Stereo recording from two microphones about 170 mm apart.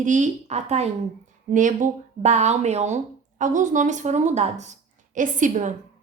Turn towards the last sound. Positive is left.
turn(degrees=-50)  # may be behind; listen again after turning